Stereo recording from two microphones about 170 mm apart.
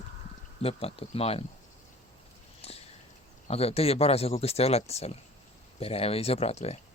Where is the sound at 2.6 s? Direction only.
35° left (ahead or behind).